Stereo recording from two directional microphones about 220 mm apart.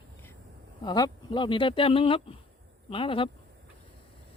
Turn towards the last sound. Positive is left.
turn(degrees=25)  # may be behind; listen again after turning